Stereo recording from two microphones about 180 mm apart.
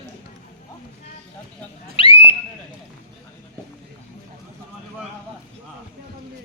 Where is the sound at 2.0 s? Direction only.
30° left (ahead or behind).